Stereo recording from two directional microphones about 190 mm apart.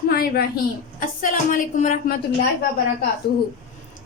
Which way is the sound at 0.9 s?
45° left (ahead or behind).